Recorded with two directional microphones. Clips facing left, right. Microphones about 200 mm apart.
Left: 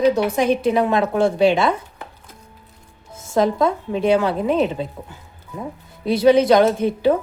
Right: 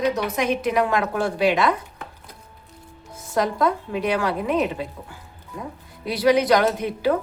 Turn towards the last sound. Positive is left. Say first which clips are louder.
# left 5 dB
turn(degrees=25)  # may be behind; listen again after turning